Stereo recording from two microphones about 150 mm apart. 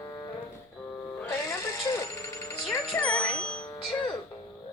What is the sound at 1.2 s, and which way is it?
Music, 20° left (ahead or behind).